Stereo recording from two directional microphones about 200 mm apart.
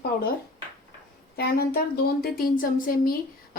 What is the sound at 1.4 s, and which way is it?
A woman's voice, 50° left (ahead or behind).